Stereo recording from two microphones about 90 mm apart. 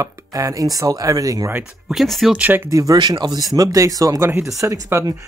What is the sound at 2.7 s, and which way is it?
Speech, 40° right (ahead or behind).